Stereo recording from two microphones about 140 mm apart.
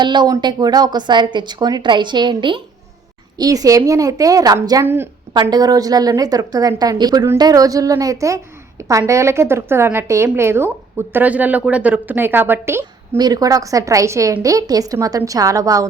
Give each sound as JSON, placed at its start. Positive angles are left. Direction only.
{"t": 0.0, "sound": "a woman's voice", "side_deg": -30}
{"t": 13.1, "sound": "a woman's voice", "side_deg": -30}